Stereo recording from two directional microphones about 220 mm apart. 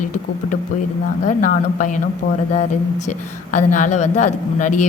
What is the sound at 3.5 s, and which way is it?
A man's voice, 35° left (ahead or behind).